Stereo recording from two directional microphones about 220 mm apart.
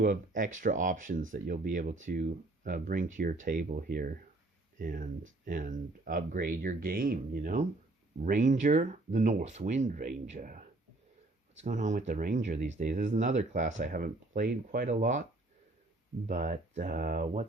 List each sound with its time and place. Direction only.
0.0 s speech: 35° right (ahead or behind)